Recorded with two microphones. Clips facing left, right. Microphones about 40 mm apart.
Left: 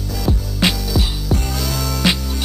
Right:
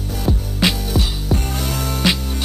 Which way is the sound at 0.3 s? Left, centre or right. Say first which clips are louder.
Even; centre.